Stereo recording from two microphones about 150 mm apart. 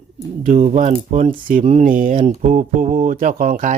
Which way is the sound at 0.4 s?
50° right (ahead or behind).